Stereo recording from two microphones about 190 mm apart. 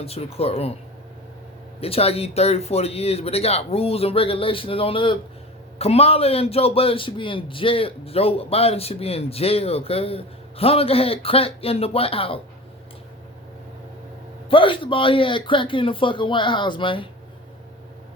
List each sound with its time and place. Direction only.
0.0 s a man's voice: 30° left (ahead or behind)
1.8 s a man's voice: 30° left (ahead or behind)
14.5 s speech: 25° left (ahead or behind)